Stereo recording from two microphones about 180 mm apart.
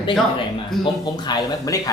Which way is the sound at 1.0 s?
25° left (ahead or behind).